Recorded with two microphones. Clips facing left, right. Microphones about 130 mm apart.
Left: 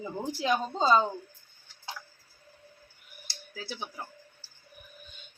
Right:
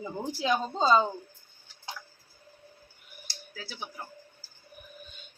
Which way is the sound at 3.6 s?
20° left (ahead or behind).